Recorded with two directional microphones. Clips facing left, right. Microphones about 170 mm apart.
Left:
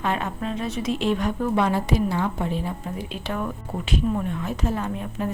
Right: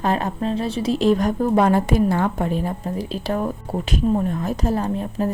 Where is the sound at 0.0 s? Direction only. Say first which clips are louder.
Right 5 dB; 35° right (ahead or behind).